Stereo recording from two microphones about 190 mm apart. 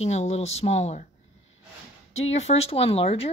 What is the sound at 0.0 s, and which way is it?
A woman's voice, 35° left (ahead or behind).